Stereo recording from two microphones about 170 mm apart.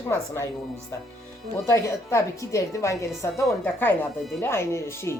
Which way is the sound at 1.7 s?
15° left (ahead or behind).